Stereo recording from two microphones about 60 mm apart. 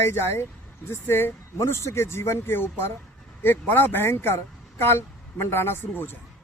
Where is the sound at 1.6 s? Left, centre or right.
Left.